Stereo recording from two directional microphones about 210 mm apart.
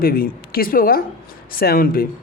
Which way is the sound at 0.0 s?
45° left (ahead or behind).